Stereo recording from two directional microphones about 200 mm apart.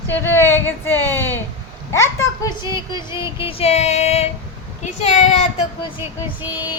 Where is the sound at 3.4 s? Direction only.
30° left (ahead or behind).